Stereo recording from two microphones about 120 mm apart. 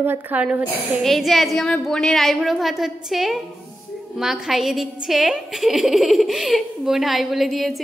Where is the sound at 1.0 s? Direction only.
Centre (ahead or behind).